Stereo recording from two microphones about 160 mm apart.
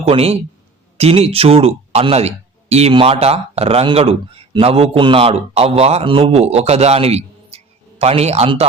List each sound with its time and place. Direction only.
0.0 s speech: 40° right (ahead or behind)